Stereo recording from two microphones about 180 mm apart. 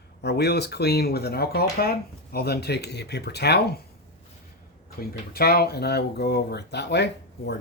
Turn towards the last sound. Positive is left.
turn(degrees=70)  # may be behind; listen again after turning